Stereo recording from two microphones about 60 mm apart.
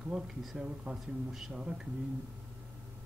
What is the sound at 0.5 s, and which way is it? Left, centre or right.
Speech, centre.